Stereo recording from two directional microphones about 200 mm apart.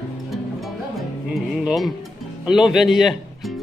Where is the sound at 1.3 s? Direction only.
Centre (ahead or behind).